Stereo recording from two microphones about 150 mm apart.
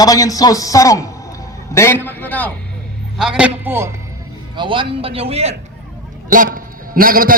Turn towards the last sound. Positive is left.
turn(degrees=-70)  # may be behind; listen again after turning